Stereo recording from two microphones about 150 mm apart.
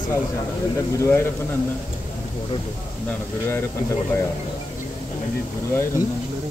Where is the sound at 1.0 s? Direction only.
15° left (ahead or behind).